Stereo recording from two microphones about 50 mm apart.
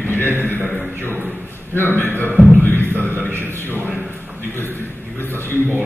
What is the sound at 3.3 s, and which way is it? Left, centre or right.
Speech, right.